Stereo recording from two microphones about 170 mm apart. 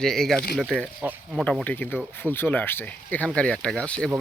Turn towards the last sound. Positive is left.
turn(degrees=5)  # may be behind; listen again after turning